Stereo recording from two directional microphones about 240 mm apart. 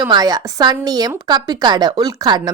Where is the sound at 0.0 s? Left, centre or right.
Centre.